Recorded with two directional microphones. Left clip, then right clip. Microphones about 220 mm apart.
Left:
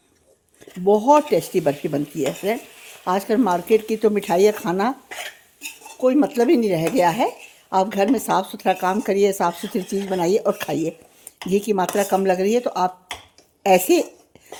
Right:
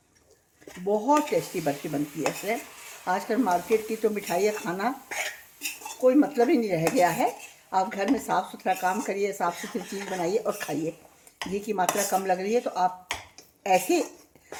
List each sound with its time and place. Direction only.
0.9 s speech: 45° left (ahead or behind)
3.0 s speech: 50° left (ahead or behind)
6.0 s a woman's voice: 45° left (ahead or behind)